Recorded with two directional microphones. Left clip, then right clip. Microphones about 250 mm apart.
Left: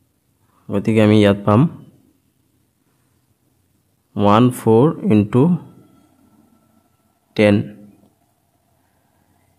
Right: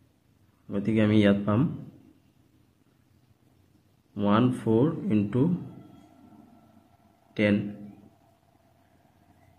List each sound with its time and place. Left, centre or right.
0.7 s speech: left
4.1 s speech: left
7.3 s speech: left